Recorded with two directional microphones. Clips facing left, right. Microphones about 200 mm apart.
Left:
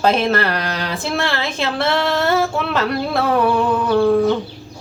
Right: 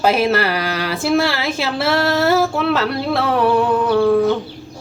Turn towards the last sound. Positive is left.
turn(degrees=0)  # may be behind; listen again after turning